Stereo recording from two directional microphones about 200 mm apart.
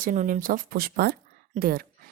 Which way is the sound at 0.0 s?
40° right (ahead or behind).